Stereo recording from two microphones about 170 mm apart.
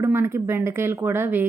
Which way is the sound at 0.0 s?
15° right (ahead or behind).